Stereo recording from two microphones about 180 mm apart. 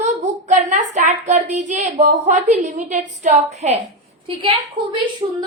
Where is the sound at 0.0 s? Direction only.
40° right (ahead or behind).